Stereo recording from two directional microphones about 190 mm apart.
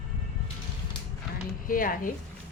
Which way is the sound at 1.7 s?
45° left (ahead or behind).